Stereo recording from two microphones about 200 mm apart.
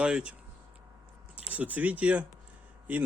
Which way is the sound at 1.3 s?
5° right (ahead or behind).